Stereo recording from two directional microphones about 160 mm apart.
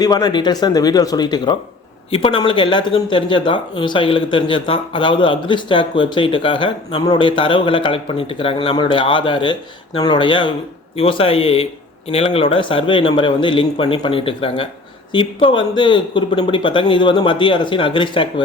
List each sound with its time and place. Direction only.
0.0 s speech: 25° left (ahead or behind)
2.0 s speech: 35° left (ahead or behind)